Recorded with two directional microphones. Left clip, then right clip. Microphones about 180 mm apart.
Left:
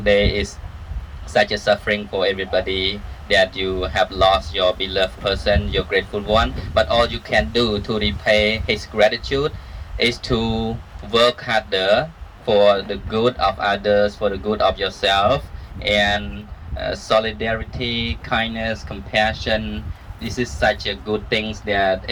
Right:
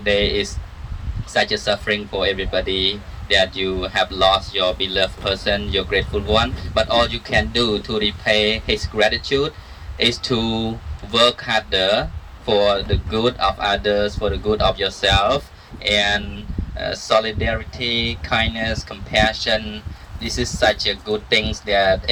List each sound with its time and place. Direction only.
0.0 s speech: 15° left (ahead or behind); by 22.1 s 25° right (ahead or behind)